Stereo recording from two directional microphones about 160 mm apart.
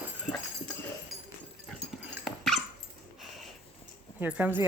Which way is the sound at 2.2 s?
Centre (ahead or behind).